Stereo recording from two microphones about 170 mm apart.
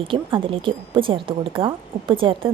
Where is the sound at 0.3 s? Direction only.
30° right (ahead or behind).